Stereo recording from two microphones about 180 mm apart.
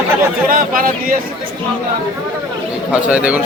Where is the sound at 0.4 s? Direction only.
50° right (ahead or behind).